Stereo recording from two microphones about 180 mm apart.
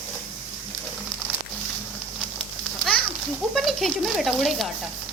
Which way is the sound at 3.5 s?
Centre (ahead or behind).